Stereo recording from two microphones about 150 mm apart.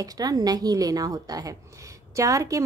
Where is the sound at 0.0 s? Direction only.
25° right (ahead or behind).